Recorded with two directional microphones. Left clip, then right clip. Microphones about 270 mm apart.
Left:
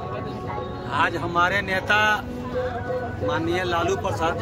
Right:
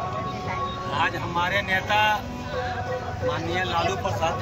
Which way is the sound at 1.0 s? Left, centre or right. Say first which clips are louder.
Left 4 dB; centre.